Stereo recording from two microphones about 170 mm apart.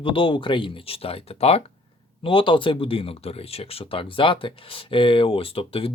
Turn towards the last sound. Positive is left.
turn(degrees=35)  # may be behind; listen again after turning